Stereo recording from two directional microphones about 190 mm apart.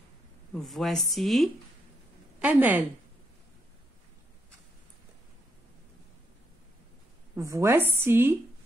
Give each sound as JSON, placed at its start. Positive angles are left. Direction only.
{"t": 0.5, "sound": "a woman's voice", "side_deg": 0}
{"t": 7.3, "sound": "a woman's voice", "side_deg": -15}